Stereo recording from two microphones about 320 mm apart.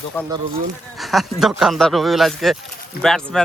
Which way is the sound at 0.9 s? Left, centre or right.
Centre.